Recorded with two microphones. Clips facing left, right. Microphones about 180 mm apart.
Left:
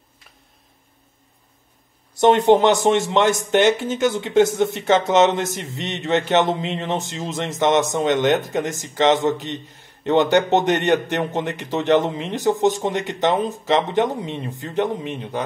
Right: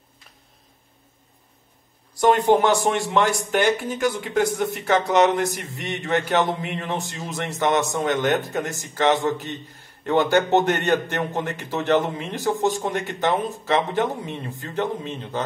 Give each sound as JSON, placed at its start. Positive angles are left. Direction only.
{"t": 2.1, "sound": "speech", "side_deg": 20}